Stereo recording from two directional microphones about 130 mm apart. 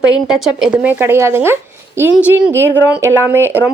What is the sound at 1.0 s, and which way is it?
Speech, 20° right (ahead or behind).